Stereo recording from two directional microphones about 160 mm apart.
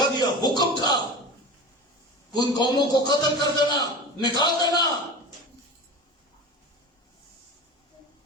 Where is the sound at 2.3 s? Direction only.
25° left (ahead or behind).